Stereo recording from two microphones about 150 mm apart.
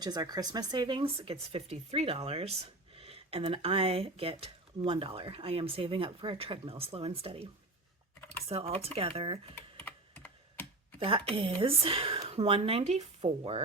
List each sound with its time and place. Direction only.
0.0 s speech: 25° right (ahead or behind)
8.4 s speech: 40° right (ahead or behind)
9.8 s computer keyboard: 10° left (ahead or behind)
11.3 s speech: 35° right (ahead or behind)